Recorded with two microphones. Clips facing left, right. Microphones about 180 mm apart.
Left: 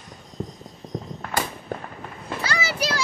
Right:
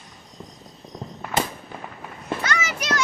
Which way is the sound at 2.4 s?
30° left (ahead or behind).